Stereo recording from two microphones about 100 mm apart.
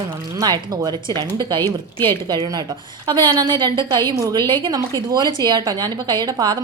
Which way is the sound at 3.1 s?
40° right (ahead or behind).